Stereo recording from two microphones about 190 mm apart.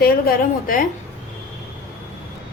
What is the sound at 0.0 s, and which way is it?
Speech, 50° left (ahead or behind).